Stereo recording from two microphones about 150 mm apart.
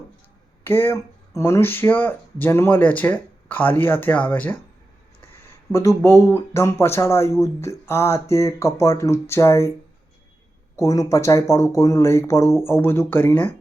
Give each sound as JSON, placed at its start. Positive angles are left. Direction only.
{"t": 0.6, "sound": "speech", "side_deg": 15}
{"t": 5.7, "sound": "speech", "side_deg": 20}
{"t": 10.8, "sound": "speech", "side_deg": 20}